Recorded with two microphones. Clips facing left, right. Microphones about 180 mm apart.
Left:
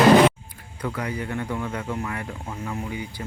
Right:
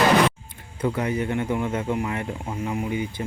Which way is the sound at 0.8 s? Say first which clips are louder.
Right 5 dB; 25° right (ahead or behind).